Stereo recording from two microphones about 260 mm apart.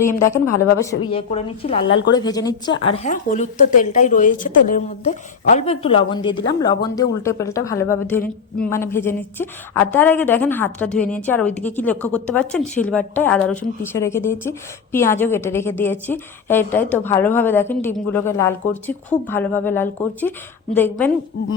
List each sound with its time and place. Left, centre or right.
0.3 s a woman's voice: left
0.8 s a woman's voice: centre
1.9 s speech: left
2.1 s a woman's voice: centre